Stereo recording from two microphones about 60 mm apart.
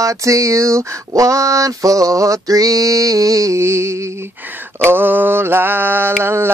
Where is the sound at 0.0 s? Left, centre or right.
Right.